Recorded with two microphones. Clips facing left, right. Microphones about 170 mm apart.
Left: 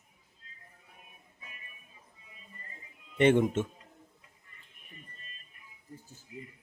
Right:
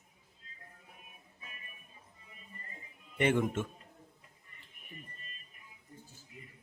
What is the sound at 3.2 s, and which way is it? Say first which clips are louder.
Speech: left 6 dB; 25° left (ahead or behind).